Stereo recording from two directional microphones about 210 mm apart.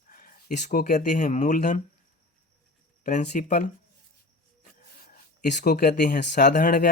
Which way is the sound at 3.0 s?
35° left (ahead or behind).